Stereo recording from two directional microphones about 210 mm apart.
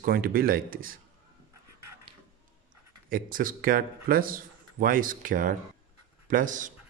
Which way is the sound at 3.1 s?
40° right (ahead or behind).